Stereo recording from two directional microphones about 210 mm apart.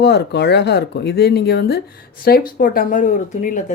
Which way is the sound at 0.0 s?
50° left (ahead or behind).